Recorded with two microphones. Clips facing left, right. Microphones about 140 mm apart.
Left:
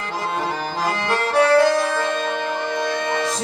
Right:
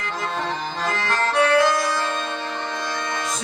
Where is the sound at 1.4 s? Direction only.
35° left (ahead or behind).